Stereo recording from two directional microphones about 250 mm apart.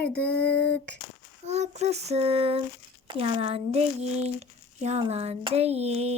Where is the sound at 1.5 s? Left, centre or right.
Right.